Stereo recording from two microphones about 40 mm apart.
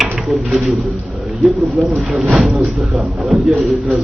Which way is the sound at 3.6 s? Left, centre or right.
Right.